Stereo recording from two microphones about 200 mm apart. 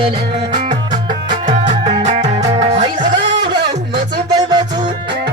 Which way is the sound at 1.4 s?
35° right (ahead or behind).